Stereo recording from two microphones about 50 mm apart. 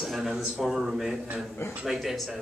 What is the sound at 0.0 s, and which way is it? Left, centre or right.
A man's voice, centre.